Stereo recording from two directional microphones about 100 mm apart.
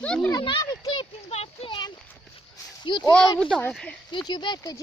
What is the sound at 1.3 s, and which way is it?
Speech, 90° left.